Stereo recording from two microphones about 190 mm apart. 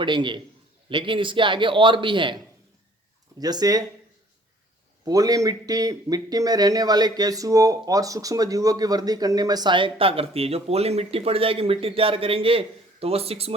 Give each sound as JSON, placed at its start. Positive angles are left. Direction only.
{"t": 0.0, "sound": "speech", "side_deg": -25}
{"t": 3.4, "sound": "speech", "side_deg": -20}
{"t": 5.0, "sound": "speech", "side_deg": -20}